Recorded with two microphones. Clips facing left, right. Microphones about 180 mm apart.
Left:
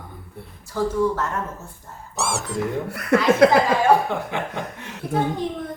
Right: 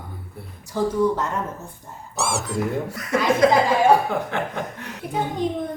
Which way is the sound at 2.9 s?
65° left (ahead or behind).